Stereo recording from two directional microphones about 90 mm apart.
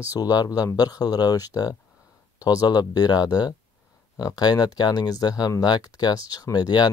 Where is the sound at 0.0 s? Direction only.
45° left (ahead or behind).